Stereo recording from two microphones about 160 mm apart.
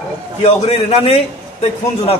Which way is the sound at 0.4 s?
40° left (ahead or behind).